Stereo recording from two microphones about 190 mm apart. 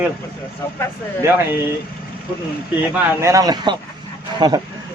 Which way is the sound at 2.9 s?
10° right (ahead or behind).